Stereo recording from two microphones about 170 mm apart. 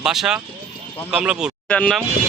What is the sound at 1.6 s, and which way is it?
Speech, 5° left (ahead or behind).